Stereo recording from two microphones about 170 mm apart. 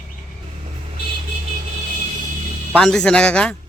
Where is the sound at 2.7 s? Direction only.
5° left (ahead or behind).